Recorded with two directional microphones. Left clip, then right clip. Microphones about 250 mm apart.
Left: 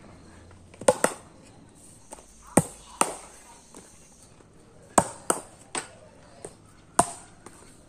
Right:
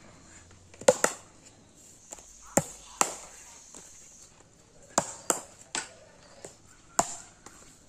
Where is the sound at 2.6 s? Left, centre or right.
Right.